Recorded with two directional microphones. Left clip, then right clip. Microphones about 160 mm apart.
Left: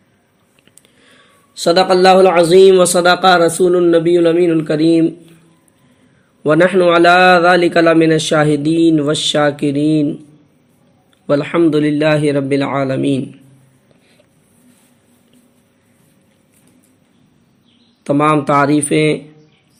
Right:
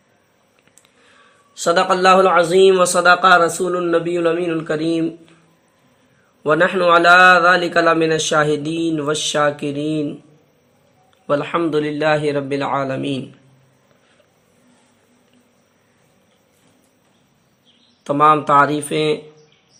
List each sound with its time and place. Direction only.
1.5 s a man's voice: 30° left (ahead or behind)
6.4 s a man's voice: 25° left (ahead or behind)
11.3 s a man's voice: 30° left (ahead or behind)
18.0 s a man's voice: 25° left (ahead or behind)